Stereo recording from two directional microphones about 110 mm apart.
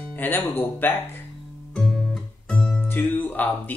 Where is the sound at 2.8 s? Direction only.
20° left (ahead or behind).